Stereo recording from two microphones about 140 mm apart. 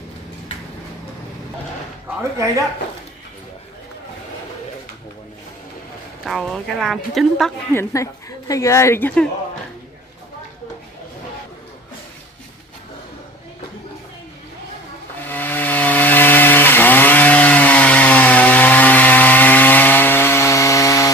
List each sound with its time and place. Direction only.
2.3 s a man's voice: 20° right (ahead or behind)
6.2 s speech: centre (ahead or behind)
7.7 s a woman's voice: 20° left (ahead or behind)
15.2 s chainsaw: 15° left (ahead or behind)